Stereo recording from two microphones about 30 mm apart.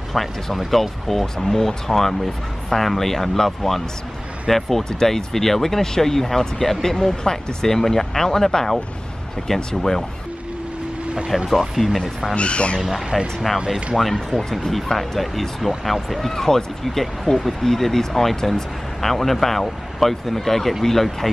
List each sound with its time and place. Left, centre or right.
0.2 s speech: centre
11.3 s speech: centre
12.4 s speech: left
12.8 s speech: centre
13.9 s speech: centre